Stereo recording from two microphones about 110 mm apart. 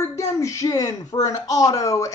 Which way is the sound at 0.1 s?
30° left (ahead or behind).